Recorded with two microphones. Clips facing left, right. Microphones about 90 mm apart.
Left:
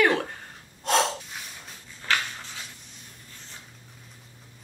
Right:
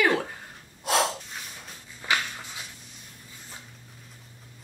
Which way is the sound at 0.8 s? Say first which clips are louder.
Left 1 dB; 5° right (ahead or behind).